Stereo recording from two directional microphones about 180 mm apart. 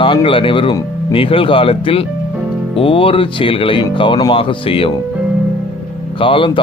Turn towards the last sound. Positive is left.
turn(degrees=30)  # may be behind; listen again after turning